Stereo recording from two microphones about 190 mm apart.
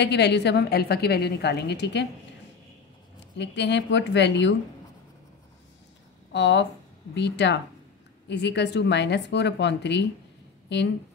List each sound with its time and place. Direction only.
0.0 s a woman's voice: 65° left (ahead or behind)
3.3 s a woman's voice: 65° left (ahead or behind)
6.3 s a woman's voice: 65° left (ahead or behind)